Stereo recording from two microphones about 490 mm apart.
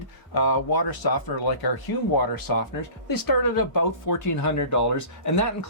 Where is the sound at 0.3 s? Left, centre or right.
Left.